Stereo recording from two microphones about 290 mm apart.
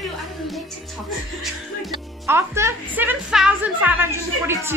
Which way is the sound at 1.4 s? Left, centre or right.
Centre.